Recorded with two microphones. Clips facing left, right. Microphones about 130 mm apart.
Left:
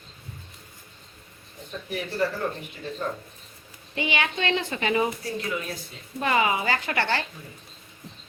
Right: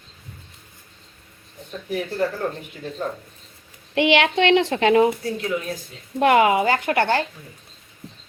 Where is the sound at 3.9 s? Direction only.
80° right.